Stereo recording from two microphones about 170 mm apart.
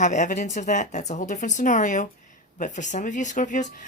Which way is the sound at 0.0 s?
45° left (ahead or behind).